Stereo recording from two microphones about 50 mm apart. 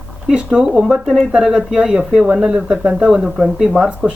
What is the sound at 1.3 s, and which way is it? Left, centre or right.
Speech, centre.